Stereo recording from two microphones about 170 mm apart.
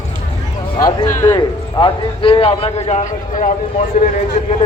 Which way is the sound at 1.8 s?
35° left (ahead or behind).